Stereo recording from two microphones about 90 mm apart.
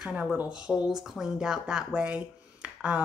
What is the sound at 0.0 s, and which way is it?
Speech, 10° right (ahead or behind).